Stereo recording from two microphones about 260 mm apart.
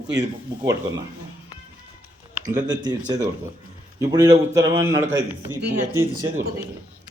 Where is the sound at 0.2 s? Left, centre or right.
Centre.